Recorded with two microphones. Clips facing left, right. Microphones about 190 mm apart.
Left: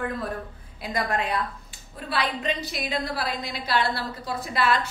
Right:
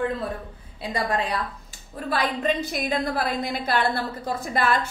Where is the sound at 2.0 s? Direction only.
45° right (ahead or behind).